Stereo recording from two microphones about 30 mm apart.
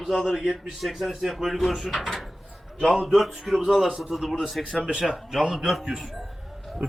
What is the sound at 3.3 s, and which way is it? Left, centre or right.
Speech, centre.